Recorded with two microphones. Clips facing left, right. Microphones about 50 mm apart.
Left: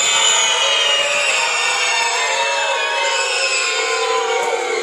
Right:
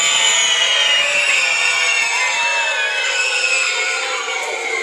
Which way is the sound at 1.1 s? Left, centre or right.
Centre.